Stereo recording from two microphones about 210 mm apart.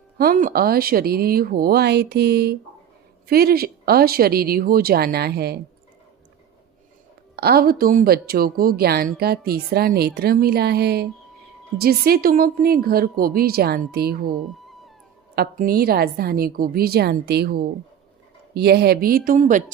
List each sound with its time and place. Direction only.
0.2 s a woman's voice: 45° right (ahead or behind)
7.3 s a woman's voice: 45° right (ahead or behind)
15.4 s a woman's voice: 45° right (ahead or behind)